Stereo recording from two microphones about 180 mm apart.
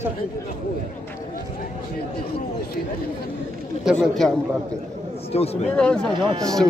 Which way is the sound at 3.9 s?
Centre (ahead or behind).